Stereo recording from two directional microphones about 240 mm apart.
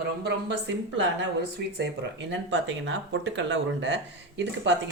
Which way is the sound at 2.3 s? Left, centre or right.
Right.